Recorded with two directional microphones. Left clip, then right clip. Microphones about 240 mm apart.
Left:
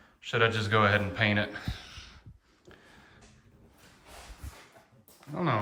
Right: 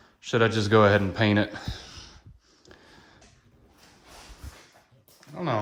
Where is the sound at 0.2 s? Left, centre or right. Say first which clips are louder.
Right 3 dB; right.